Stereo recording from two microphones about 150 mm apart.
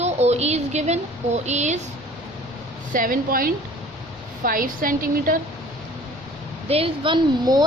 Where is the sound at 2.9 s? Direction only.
65° right (ahead or behind).